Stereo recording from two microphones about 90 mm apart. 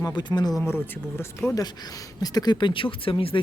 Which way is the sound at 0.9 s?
25° left (ahead or behind).